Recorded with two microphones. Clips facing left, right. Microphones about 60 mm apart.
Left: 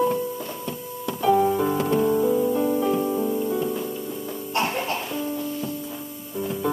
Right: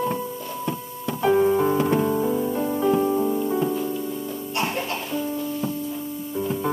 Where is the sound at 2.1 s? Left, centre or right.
Centre.